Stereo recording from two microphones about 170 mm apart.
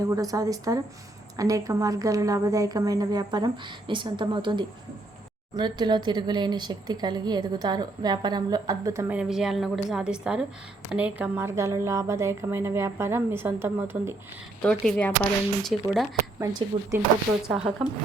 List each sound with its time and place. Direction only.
0.1 s speech: 20° right (ahead or behind)
9.1 s a woman's voice: centre (ahead or behind)
14.6 s a woman's voice: 5° left (ahead or behind)
16.4 s speech: 20° right (ahead or behind)
17.5 s a woman's voice: 5° right (ahead or behind)